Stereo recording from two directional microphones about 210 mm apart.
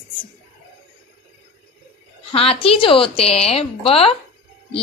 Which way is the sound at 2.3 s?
25° left (ahead or behind).